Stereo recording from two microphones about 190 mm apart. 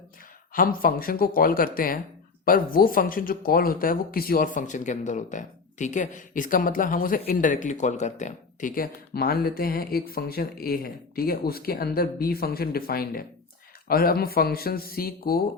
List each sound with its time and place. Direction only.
0.5 s speech: 50° left (ahead or behind)